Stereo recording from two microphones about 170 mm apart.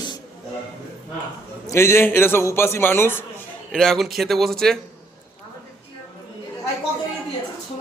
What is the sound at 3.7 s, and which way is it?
Speech, centre (ahead or behind).